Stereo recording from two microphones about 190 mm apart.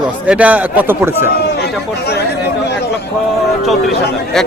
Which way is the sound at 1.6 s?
60° left (ahead or behind).